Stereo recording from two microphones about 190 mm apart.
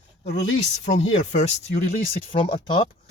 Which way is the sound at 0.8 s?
35° left (ahead or behind).